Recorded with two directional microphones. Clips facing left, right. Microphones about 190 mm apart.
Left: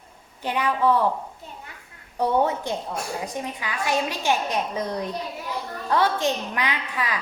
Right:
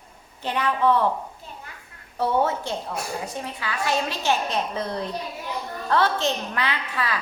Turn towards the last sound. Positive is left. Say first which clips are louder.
# even
turn(degrees=15)  # may be behind; listen again after turning